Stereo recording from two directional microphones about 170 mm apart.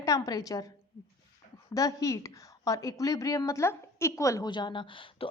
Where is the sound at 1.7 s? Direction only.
20° left (ahead or behind).